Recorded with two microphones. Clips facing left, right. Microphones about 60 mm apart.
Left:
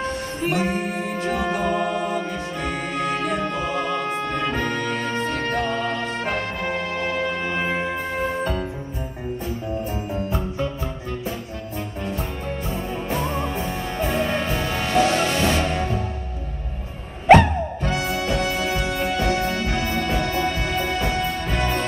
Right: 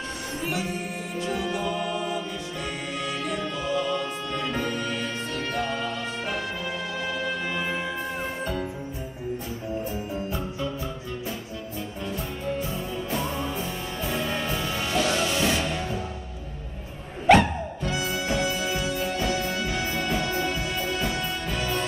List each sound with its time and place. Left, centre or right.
0.4 s music: left
12.4 s music: left
17.4 s music: left